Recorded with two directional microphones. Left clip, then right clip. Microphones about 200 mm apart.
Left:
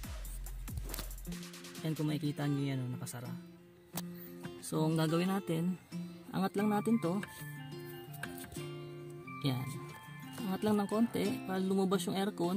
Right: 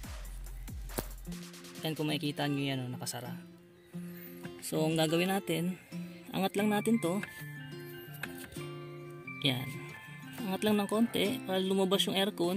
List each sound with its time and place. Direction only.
1.8 s speech: centre (ahead or behind)
4.8 s speech: centre (ahead or behind)